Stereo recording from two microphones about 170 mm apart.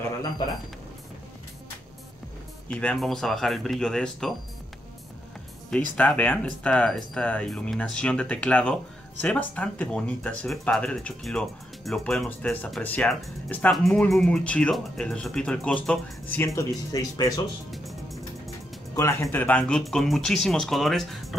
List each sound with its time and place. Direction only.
2.7 s speech: 5° left (ahead or behind)
5.7 s speech: 10° left (ahead or behind)
17.6 s music: centre (ahead or behind)
18.9 s speech: 15° left (ahead or behind); by 21.4 s centre (ahead or behind)